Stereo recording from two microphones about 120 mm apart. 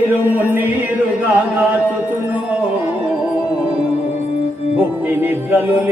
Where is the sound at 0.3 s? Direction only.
15° right (ahead or behind).